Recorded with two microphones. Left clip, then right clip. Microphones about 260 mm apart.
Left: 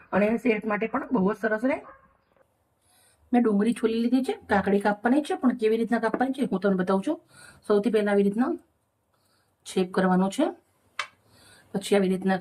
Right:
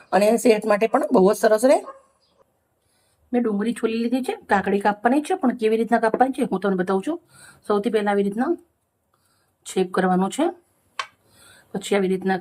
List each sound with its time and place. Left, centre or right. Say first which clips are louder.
0.4 s speech: right 8 dB; centre
3.3 s a woman's voice: right 1 dB; centre
9.6 s speech: right 4 dB; centre
11.7 s a woman's voice: right 2 dB; centre